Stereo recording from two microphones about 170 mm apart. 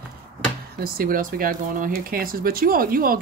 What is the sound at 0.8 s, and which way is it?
Speech, 60° right (ahead or behind).